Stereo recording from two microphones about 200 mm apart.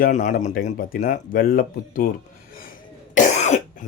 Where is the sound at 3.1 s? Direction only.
35° left (ahead or behind).